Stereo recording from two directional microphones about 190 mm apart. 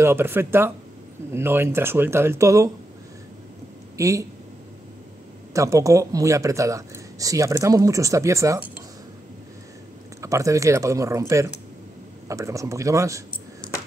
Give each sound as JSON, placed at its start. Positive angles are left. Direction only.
{"t": 0.0, "sound": "speech", "side_deg": -10}
{"t": 3.9, "sound": "speech", "side_deg": -15}
{"t": 5.5, "sound": "speech", "side_deg": -15}
{"t": 10.2, "sound": "speech", "side_deg": -15}